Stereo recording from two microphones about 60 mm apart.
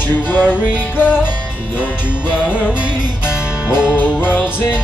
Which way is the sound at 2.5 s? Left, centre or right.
Centre.